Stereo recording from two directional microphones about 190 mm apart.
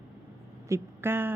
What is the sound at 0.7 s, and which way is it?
Speech, 10° right (ahead or behind).